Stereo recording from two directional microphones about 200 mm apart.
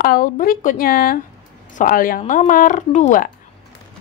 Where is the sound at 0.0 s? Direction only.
45° left (ahead or behind).